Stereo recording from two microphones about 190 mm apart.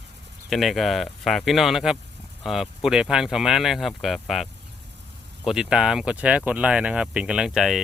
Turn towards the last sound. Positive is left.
turn(degrees=0)  # may be behind; listen again after turning